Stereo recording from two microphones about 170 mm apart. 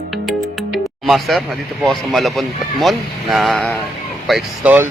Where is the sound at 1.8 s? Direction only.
Centre (ahead or behind).